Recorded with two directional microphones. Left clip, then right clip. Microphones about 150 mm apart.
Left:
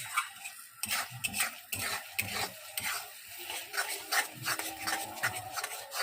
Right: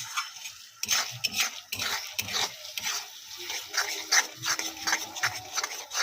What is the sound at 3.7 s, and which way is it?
Rub, 15° right (ahead or behind).